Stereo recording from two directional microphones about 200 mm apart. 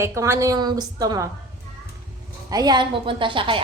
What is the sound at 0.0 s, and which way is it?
A child's voice, 15° right (ahead or behind).